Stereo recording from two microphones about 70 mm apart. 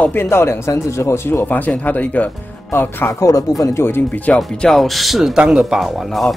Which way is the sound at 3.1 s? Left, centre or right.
Left.